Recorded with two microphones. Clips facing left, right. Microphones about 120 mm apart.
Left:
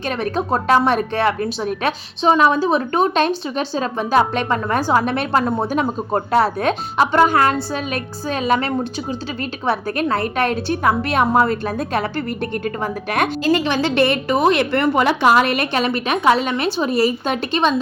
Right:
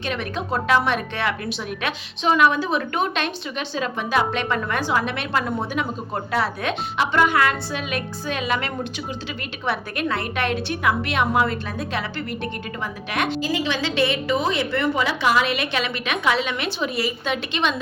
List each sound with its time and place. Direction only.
0.0 s a woman's voice: 40° left (ahead or behind)
13.4 s a woman's voice: 60° left (ahead or behind); by 17.7 s 40° left (ahead or behind)